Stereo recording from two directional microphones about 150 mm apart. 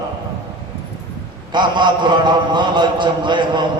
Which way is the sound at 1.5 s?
30° right (ahead or behind).